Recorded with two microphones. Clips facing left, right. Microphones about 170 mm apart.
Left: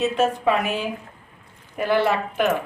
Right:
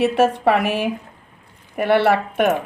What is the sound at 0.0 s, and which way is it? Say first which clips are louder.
Speech: right 4 dB; 75° right (ahead or behind).